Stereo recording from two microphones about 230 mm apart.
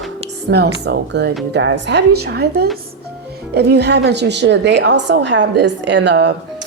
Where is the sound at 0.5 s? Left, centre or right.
Right.